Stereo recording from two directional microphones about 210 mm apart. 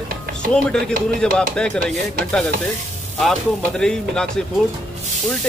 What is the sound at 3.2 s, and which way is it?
Speech, centre (ahead or behind).